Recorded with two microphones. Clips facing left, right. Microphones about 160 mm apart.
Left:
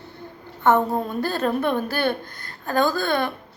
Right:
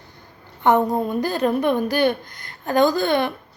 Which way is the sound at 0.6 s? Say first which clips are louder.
Right 2 dB; 15° right (ahead or behind).